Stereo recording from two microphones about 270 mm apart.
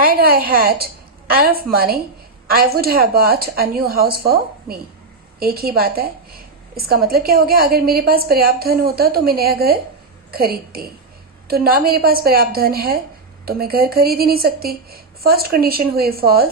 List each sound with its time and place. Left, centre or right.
0.0 s a woman's voice: right